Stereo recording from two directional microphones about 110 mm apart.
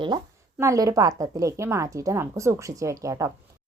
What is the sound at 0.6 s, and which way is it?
A woman's voice, 30° right (ahead or behind).